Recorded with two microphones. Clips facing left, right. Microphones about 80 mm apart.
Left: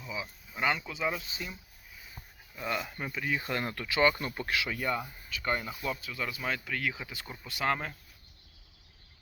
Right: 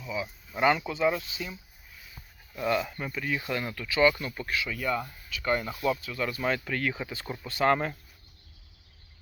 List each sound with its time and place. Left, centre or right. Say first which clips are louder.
0.0 s a sound: right 5 dB; centre
0.6 s speech: right 6 dB; centre
0.9 s speech: right 7 dB; centre
2.6 s speech: right 6 dB; centre
3.4 s speech: right 1 dB; left
4.4 s speech: right 1 dB; left
4.8 s speech: right 2 dB; centre